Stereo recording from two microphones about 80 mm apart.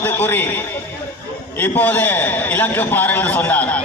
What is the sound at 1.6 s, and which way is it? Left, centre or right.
A man's voice, left.